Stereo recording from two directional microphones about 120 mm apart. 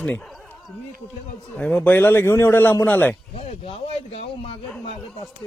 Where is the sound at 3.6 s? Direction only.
60° left (ahead or behind).